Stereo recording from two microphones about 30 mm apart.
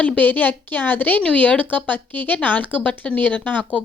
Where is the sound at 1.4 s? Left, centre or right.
Left.